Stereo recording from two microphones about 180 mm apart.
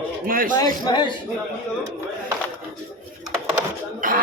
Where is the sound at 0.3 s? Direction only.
50° right (ahead or behind).